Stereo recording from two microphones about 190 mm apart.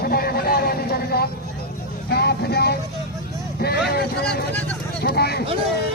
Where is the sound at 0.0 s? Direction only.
55° left (ahead or behind).